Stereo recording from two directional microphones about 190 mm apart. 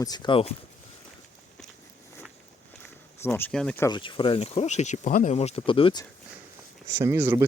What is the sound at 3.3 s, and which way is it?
Speech, 5° left (ahead or behind).